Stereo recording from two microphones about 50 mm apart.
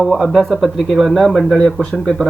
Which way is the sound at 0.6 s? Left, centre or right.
Centre.